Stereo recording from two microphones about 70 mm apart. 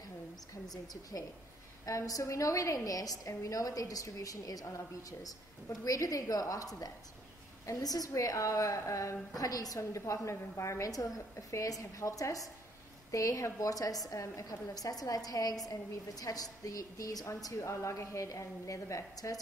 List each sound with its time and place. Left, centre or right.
1.9 s a woman's voice: left
14.7 s a woman's voice: left